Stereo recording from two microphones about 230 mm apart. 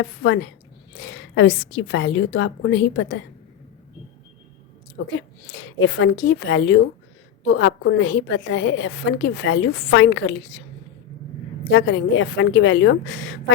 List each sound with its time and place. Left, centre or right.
0.0 s a woman's voice: left
5.0 s a woman's voice: left
11.7 s a woman's voice: left